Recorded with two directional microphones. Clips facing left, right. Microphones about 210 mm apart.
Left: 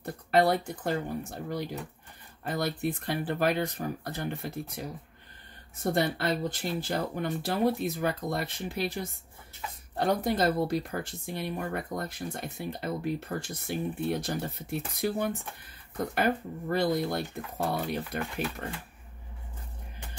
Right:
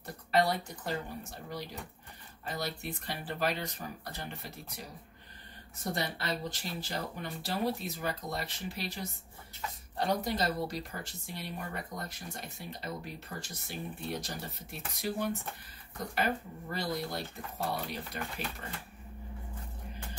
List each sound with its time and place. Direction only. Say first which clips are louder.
0.0 s speech: left 5 dB; 55° left (ahead or behind)
5.9 s speech: left 8 dB; 55° left (ahead or behind)